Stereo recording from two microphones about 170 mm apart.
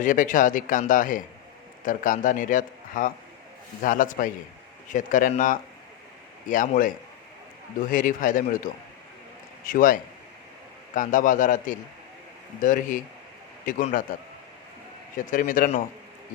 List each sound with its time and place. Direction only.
0.0 s speech: 50° left (ahead or behind)
9.6 s speech: 55° left (ahead or behind)
15.3 s speech: 50° left (ahead or behind)